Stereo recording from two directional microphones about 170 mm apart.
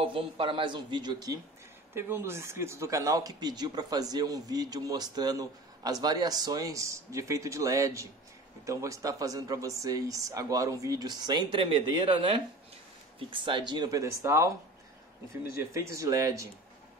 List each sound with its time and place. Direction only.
0.0 s speech: 30° right (ahead or behind)
2.0 s speech: 15° right (ahead or behind)